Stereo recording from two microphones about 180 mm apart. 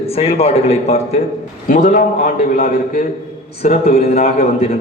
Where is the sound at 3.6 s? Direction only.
35° left (ahead or behind).